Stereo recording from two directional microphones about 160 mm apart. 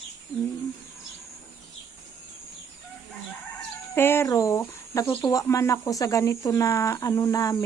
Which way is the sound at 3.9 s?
15° left (ahead or behind).